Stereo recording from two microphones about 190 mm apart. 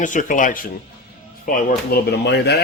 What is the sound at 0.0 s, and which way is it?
Speech, 40° left (ahead or behind).